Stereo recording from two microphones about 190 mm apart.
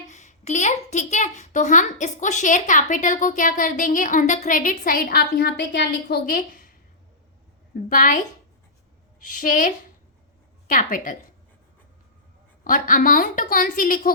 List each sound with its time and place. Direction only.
0.1 s speech: 40° left (ahead or behind)
9.2 s speech: 45° left (ahead or behind)
12.6 s speech: 45° left (ahead or behind)